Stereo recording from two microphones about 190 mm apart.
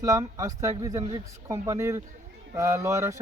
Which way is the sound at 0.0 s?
15° right (ahead or behind).